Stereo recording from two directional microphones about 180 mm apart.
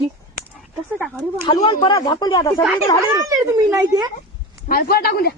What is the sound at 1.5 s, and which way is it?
Speech, 30° left (ahead or behind).